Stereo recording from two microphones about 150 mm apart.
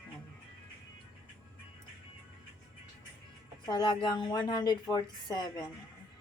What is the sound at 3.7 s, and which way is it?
A woman's voice, 30° left (ahead or behind).